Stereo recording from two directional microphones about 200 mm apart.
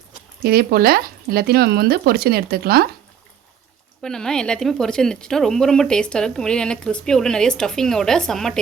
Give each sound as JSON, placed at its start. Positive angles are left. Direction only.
{"t": 0.4, "sound": "speech", "side_deg": -50}
{"t": 4.0, "sound": "speech", "side_deg": 5}